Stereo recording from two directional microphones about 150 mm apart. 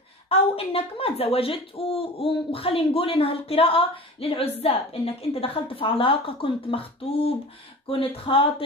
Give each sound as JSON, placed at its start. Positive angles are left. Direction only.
{"t": 0.3, "sound": "speech", "side_deg": 40}